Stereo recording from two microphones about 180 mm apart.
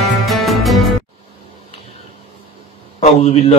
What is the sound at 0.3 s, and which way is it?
Music, centre (ahead or behind).